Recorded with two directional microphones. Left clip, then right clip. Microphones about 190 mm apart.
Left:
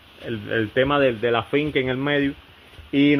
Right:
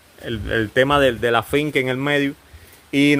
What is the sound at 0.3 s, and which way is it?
Speech, 55° right (ahead or behind).